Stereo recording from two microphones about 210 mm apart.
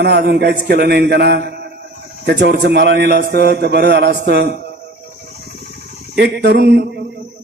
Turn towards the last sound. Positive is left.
turn(degrees=-50)  # may be behind; listen again after turning